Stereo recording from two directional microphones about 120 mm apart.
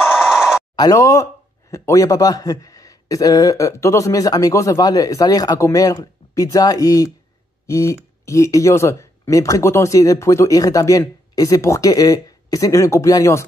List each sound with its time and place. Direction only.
0.7 s speech: 30° left (ahead or behind)